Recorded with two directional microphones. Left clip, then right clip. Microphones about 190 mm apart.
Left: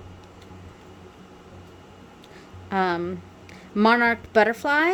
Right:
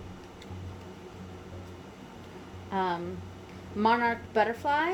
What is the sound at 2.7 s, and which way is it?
Speech, 60° left (ahead or behind).